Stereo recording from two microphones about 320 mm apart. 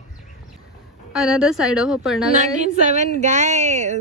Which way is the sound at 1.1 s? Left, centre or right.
Centre.